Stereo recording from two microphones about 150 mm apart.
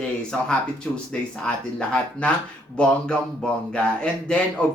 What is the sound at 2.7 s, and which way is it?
Speech, 5° left (ahead or behind).